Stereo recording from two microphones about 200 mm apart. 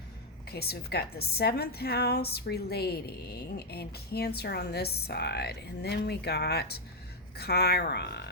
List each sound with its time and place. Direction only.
0.5 s a woman's voice: 50° left (ahead or behind)